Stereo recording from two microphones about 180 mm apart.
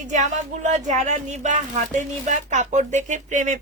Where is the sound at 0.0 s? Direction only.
40° right (ahead or behind).